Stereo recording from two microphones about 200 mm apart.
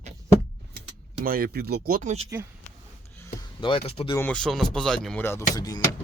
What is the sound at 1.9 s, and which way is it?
Speech, 40° right (ahead or behind).